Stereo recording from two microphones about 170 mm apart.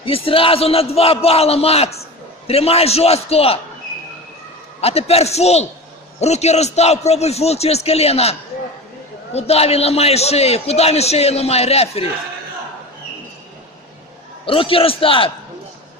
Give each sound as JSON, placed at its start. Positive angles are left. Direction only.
{"t": 0.0, "sound": "a man's voice", "side_deg": 30}
{"t": 4.8, "sound": "a man's voice", "side_deg": 35}
{"t": 14.4, "sound": "a man's voice", "side_deg": 30}